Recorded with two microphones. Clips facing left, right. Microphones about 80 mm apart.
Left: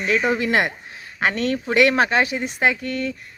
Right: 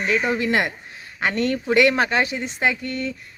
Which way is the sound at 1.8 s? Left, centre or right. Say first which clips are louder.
Left 2 dB; centre.